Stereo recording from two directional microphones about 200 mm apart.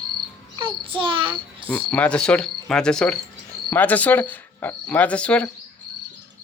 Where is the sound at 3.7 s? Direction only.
10° left (ahead or behind).